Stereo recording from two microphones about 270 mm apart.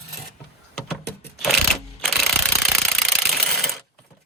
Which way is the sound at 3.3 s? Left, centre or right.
Centre.